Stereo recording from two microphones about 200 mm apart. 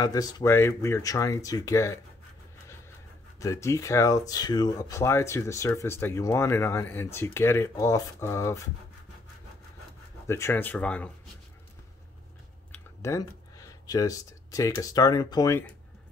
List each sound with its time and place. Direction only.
0.0 s speech: 20° left (ahead or behind)
3.3 s speech: 15° left (ahead or behind)
10.2 s speech: 15° left (ahead or behind)
12.7 s speech: 15° left (ahead or behind)